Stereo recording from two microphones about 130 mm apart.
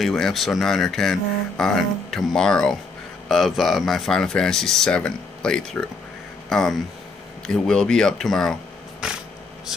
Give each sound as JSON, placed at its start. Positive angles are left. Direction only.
{"t": 0.0, "sound": "speech", "side_deg": 0}